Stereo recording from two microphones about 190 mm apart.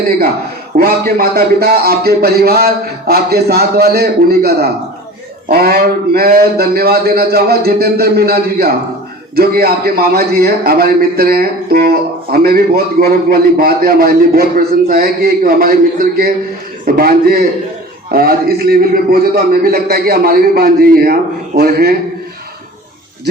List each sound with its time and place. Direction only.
0.8 s a man's voice: 50° right (ahead or behind)